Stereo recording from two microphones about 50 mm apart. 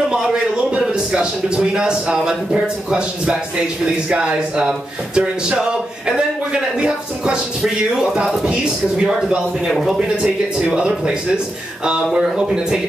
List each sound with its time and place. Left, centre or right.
0.1 s a man's voice: centre
9.7 s speech: centre
10.2 s speech: centre